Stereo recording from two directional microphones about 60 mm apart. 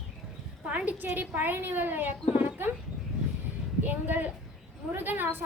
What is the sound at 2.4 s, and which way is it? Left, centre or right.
Dog, right.